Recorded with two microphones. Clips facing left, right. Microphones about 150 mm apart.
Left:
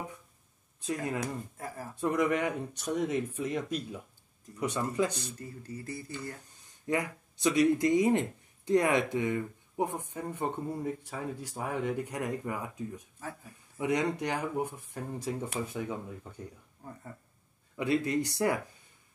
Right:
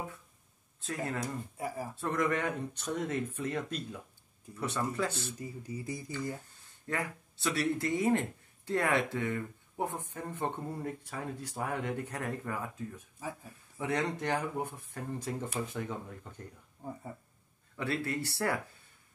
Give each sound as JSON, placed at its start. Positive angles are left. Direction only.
{"t": 2.0, "sound": "speech", "side_deg": 10}
{"t": 5.4, "sound": "speech", "side_deg": -10}
{"t": 6.4, "sound": "speech", "side_deg": 15}
{"t": 16.8, "sound": "speech", "side_deg": -15}
{"t": 17.7, "sound": "speech", "side_deg": 15}